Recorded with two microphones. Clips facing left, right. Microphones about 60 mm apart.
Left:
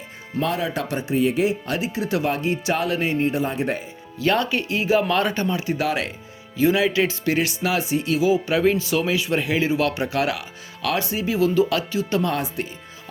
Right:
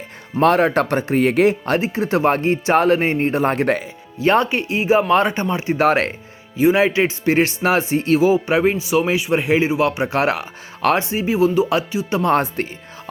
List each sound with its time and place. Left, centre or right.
0.3 s speech: right
4.2 s speech: right
6.6 s speech: right
12.2 s speech: right